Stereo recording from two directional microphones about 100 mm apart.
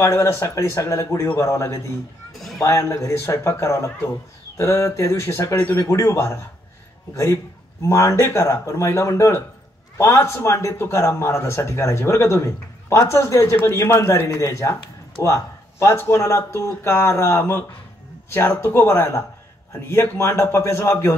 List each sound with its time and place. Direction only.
0.0 s a man's voice: 25° left (ahead or behind)
7.8 s a man's voice: 30° left (ahead or behind)